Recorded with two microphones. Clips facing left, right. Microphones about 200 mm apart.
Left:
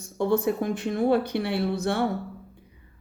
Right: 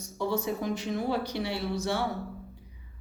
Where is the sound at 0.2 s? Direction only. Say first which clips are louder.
Left 6 dB; 55° left (ahead or behind).